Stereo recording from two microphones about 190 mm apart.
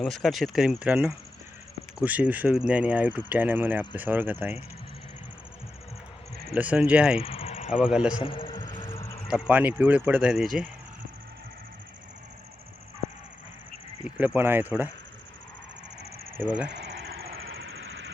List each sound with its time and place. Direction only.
0.0 s speech: centre (ahead or behind)
6.5 s speech: 5° right (ahead or behind)
7.2 s cricket: 30° left (ahead or behind)
7.7 s speech: 5° right (ahead or behind)
8.2 s a sound: 25° left (ahead or behind)
9.3 s speech: 10° right (ahead or behind)
14.0 s speech: 10° right (ahead or behind)
16.4 s speech: 5° right (ahead or behind)
16.6 s cricket: 60° right (ahead or behind)
17.4 s a sound: 60° right (ahead or behind)